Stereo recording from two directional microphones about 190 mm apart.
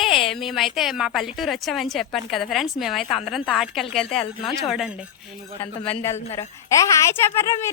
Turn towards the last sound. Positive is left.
turn(degrees=15)  # may be behind; listen again after turning